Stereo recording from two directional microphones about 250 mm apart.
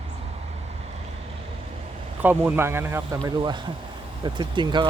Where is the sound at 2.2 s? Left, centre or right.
Centre.